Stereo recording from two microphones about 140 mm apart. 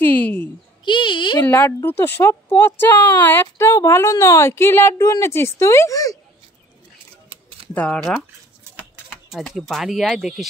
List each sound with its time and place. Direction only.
0.0 s a sound: 15° left (ahead or behind)
0.8 s a child's voice: 35° left (ahead or behind)
1.4 s speech: 20° left (ahead or behind)
7.2 s camera: 40° right (ahead or behind)
7.7 s speech: 10° left (ahead or behind)
8.7 s speech: 5° right (ahead or behind)